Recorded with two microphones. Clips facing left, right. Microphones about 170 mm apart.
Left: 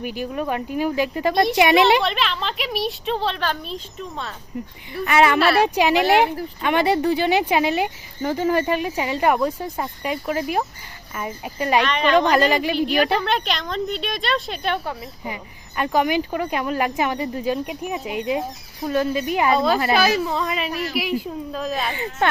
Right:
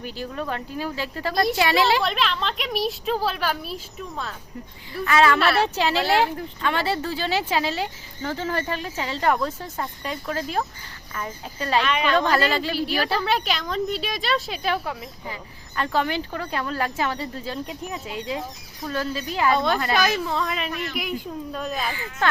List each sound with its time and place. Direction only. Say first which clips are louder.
0.0 s a woman's voice: left 5 dB; 15° left (ahead or behind)
2.0 s speech: left 1 dB; centre (ahead or behind)
5.0 s a woman's voice: left 2 dB; 20° left (ahead or behind)
11.9 s speech: left 2 dB; 5° right (ahead or behind)
12.1 s a woman's voice: left 6 dB; 15° left (ahead or behind)
13.2 s speech: left 1 dB; 5° right (ahead or behind)
15.2 s speech: left 4 dB; 15° left (ahead or behind)
19.5 s speech: left 3 dB; 5° left (ahead or behind)
21.8 s a woman's voice: left 3 dB; 25° left (ahead or behind)